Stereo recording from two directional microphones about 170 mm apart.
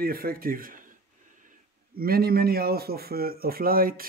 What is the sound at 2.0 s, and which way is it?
Speech, 65° right (ahead or behind).